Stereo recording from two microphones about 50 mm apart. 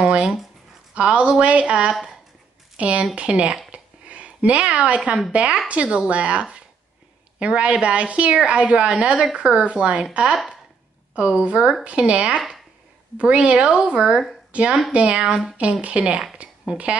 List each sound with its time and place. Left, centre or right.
0.2 s speech: centre
0.9 s speech: right
2.8 s speech: right
3.7 s a sound: right
5.3 s speech: right